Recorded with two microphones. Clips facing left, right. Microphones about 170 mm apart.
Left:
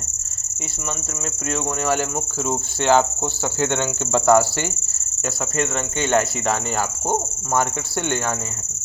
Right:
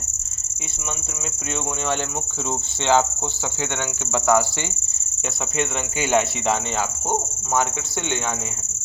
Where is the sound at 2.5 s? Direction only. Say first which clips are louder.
Left 2 dB; 10° left (ahead or behind).